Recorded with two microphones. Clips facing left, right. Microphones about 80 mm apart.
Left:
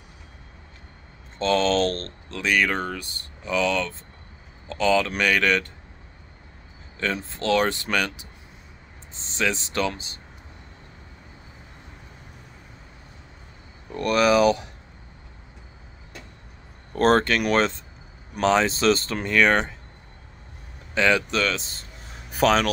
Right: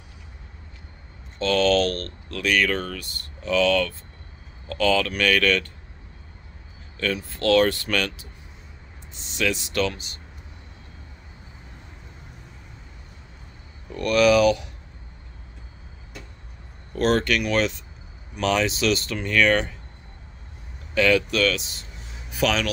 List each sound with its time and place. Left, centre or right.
1.4 s speech: left
7.0 s speech: left
9.1 s speech: left
13.9 s speech: left
16.9 s speech: left
20.9 s speech: left
22.3 s speech: left